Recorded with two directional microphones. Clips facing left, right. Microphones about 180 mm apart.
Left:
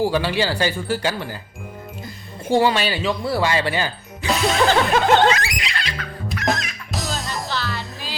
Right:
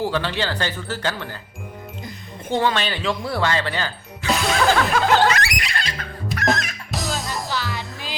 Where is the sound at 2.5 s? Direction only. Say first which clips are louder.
Left 4 dB; 10° left (ahead or behind).